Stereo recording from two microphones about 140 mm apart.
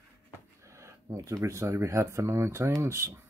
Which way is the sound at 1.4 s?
20° right (ahead or behind).